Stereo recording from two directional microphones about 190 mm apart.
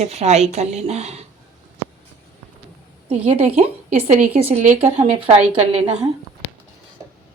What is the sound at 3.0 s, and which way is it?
Speech, 30° right (ahead or behind).